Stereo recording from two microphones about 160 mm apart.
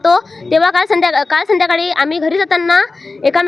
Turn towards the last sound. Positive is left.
turn(degrees=0)  # may be behind; listen again after turning